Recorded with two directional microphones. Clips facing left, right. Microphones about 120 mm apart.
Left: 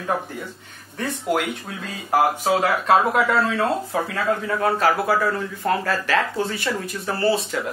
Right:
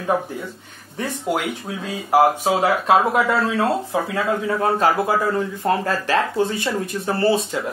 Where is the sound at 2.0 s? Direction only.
15° right (ahead or behind).